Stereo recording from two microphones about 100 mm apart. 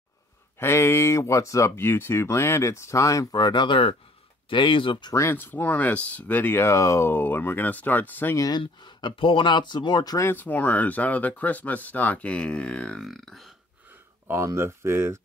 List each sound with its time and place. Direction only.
0.6 s speech: 25° left (ahead or behind); by 5.1 s 55° left (ahead or behind)
5.1 s speech: 25° left (ahead or behind)
8.4 s speech: 45° left (ahead or behind)
10.1 s speech: 20° left (ahead or behind); by 13.5 s centre (ahead or behind)
14.2 s speech: 30° right (ahead or behind)